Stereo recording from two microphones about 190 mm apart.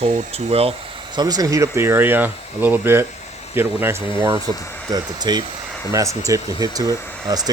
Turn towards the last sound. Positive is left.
turn(degrees=-20)  # may be behind; listen again after turning